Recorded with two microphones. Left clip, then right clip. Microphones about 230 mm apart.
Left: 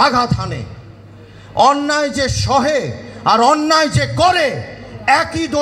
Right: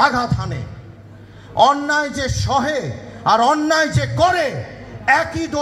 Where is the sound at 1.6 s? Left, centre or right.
Left.